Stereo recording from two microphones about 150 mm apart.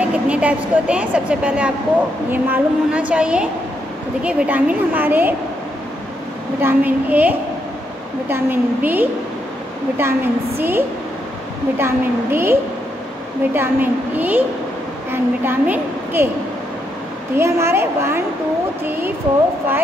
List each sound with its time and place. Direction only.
0.0 s speech: 10° right (ahead or behind)
6.6 s speech: 10° right (ahead or behind)
11.8 s a woman's voice: 15° right (ahead or behind)
17.4 s speech: 15° right (ahead or behind)